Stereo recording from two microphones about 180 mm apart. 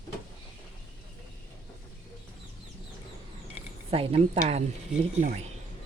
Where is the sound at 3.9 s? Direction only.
35° right (ahead or behind).